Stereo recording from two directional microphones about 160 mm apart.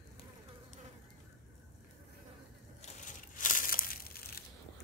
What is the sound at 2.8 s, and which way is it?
Crushing, 55° left (ahead or behind).